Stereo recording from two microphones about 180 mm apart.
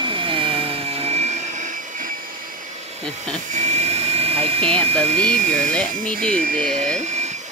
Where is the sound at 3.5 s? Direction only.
40° right (ahead or behind).